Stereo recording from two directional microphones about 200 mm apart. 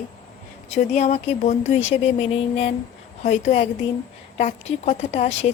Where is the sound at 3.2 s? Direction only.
35° left (ahead or behind).